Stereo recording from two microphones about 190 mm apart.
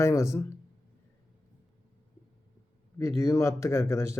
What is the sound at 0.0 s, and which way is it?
Speech, 15° left (ahead or behind).